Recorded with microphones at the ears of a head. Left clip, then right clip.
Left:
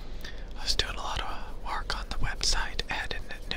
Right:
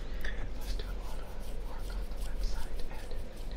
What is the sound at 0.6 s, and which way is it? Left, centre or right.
Whispering, left.